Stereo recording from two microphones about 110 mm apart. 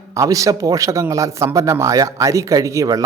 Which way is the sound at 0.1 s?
30° right (ahead or behind).